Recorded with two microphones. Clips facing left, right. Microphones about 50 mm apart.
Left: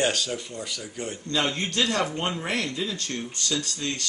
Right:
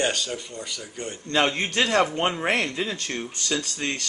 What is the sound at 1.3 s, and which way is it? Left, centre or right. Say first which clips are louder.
A man's voice: right 4 dB; right.